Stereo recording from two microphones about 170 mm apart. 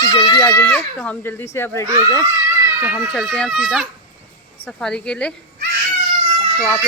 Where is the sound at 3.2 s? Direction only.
Centre (ahead or behind).